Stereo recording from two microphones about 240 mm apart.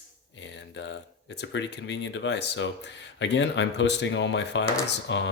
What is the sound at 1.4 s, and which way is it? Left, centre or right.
Speech, left.